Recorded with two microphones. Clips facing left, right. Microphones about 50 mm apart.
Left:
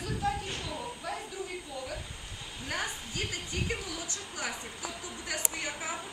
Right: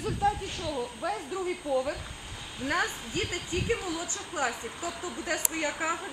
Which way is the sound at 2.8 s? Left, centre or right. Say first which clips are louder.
Right 5 dB; right.